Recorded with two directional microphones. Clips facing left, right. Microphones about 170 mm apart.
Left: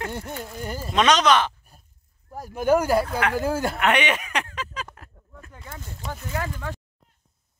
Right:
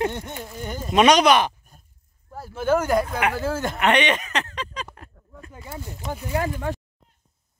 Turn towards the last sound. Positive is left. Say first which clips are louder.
# right 5 dB
turn(degrees=-20)  # may be behind; listen again after turning